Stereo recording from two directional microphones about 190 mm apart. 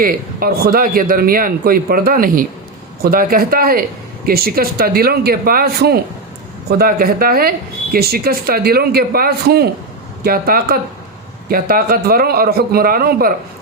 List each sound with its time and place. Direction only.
0.0 s a man's voice: 50° right (ahead or behind)